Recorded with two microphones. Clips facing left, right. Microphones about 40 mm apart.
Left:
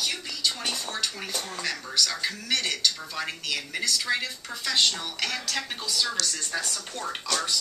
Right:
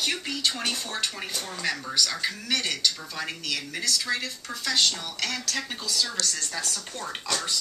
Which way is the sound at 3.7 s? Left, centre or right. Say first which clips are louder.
Left 1 dB; centre.